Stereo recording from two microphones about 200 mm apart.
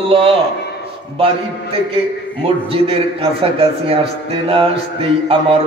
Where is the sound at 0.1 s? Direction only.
30° right (ahead or behind).